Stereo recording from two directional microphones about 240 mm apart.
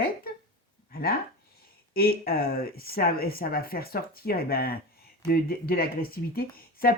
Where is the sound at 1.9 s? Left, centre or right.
Left.